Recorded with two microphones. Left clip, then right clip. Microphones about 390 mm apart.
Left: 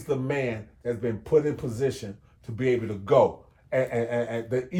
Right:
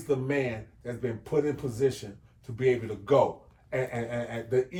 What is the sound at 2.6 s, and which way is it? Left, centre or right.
Speech, left.